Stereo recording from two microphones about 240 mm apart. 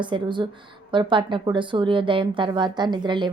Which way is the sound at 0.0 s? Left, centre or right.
Centre.